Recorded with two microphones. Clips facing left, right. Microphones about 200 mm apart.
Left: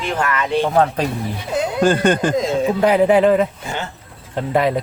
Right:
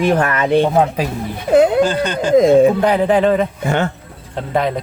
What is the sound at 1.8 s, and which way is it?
Speech, 50° left (ahead or behind).